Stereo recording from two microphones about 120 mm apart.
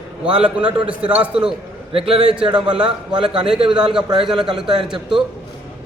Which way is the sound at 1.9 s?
50° right (ahead or behind).